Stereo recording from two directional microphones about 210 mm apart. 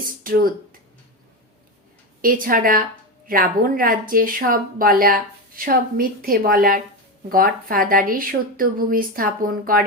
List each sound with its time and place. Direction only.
0.2 s speech: 45° right (ahead or behind)
2.2 s speech: 40° right (ahead or behind)